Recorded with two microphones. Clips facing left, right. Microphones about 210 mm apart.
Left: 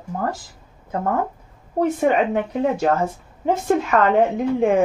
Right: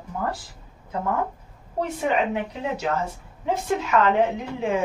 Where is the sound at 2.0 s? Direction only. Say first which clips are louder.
Left 3 dB; 50° left (ahead or behind).